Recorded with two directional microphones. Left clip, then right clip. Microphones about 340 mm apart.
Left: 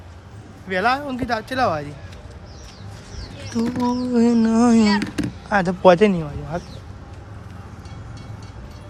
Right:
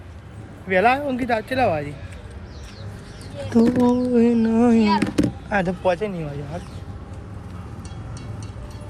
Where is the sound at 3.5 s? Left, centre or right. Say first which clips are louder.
Right 5 dB; centre.